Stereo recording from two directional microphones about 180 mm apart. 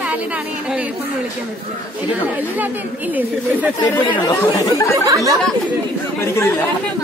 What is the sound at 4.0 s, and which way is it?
Speech, 25° left (ahead or behind).